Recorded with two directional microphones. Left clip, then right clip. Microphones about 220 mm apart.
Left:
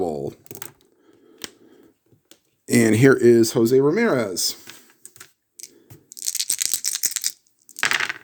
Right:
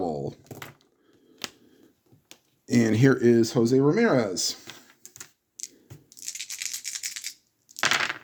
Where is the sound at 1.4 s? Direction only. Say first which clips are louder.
Even; 10° right (ahead or behind).